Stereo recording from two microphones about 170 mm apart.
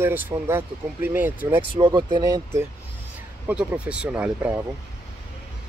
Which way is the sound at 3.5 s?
5° right (ahead or behind).